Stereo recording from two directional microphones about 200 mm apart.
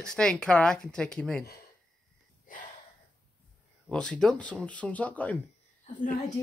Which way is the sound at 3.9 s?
5° left (ahead or behind).